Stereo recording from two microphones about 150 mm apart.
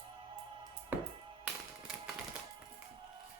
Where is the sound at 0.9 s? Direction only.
10° right (ahead or behind).